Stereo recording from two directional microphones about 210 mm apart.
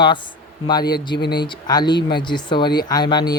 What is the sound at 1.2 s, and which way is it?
Speech, 50° left (ahead or behind).